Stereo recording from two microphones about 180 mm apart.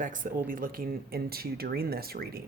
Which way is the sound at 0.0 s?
45° right (ahead or behind).